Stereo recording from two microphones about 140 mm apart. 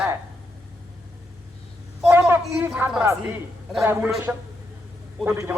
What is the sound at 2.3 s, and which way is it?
A man's voice, 15° right (ahead or behind).